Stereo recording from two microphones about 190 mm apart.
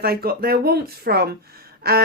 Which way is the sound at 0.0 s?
55° right (ahead or behind).